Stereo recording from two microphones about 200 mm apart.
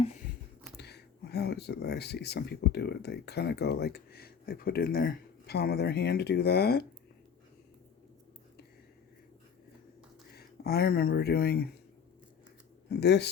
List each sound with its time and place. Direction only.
0.8 s speech: 55° left (ahead or behind)
10.3 s speech: 50° left (ahead or behind)
12.9 s speech: 60° left (ahead or behind)